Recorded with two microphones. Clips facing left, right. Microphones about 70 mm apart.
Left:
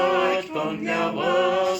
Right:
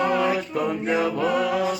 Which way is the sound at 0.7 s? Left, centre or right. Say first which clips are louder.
Right 3 dB; right.